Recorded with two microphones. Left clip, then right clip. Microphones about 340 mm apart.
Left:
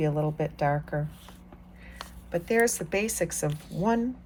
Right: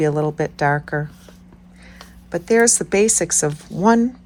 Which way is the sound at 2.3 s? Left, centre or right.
Centre.